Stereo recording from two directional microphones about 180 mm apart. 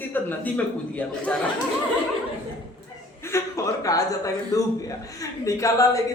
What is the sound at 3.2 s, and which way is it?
A man's voice, 15° left (ahead or behind).